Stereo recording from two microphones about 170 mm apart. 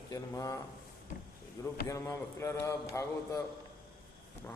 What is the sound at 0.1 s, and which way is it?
Speech, 20° left (ahead or behind).